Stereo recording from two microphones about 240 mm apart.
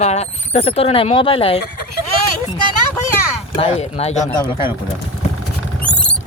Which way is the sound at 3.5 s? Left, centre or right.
Left.